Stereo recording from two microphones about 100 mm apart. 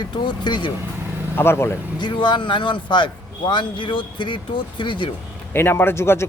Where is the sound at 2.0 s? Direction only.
50° left (ahead or behind).